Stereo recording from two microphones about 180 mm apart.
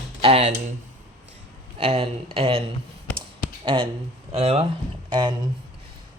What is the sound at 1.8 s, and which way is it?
Speech, 35° right (ahead or behind).